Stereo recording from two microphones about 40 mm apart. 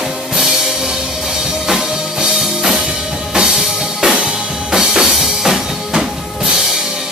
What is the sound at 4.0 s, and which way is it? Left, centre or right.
Music, centre.